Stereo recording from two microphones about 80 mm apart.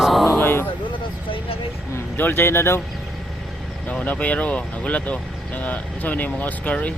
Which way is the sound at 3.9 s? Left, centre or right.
Centre.